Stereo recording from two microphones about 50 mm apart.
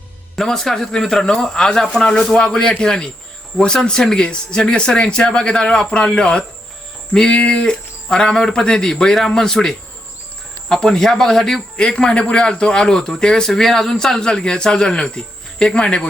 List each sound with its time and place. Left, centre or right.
0.3 s a man's voice: centre